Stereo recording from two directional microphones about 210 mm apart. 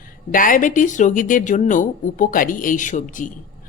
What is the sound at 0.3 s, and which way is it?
A woman's voice, 40° left (ahead or behind).